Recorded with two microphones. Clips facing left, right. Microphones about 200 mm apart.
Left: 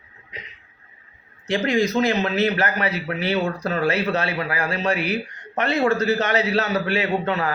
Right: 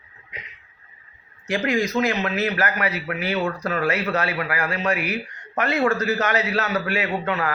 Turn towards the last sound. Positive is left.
turn(degrees=30)  # may be behind; listen again after turning